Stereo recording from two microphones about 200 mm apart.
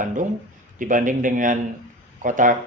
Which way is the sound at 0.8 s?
40° right (ahead or behind).